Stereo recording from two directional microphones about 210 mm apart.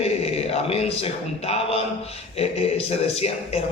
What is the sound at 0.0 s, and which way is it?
A man's voice, 30° left (ahead or behind).